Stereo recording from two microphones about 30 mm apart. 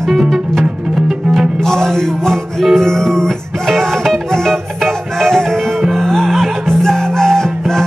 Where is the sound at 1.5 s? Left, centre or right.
Centre.